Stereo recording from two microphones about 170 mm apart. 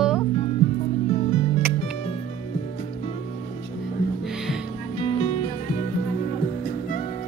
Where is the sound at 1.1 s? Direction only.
40° left (ahead or behind).